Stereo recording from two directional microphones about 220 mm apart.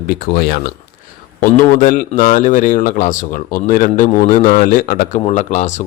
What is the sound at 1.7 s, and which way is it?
Speech, 40° left (ahead or behind).